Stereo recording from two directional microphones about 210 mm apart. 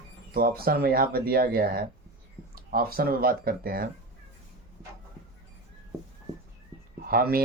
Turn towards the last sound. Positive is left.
turn(degrees=-45)  # may be behind; listen again after turning